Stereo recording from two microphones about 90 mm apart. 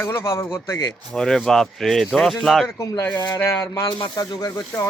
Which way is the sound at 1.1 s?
5° left (ahead or behind).